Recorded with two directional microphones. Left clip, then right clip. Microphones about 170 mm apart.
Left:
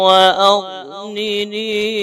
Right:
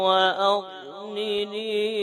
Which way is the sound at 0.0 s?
35° left (ahead or behind).